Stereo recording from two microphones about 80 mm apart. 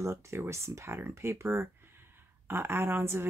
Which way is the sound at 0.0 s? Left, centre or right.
Right.